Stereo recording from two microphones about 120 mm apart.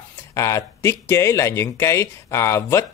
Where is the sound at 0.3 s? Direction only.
25° left (ahead or behind).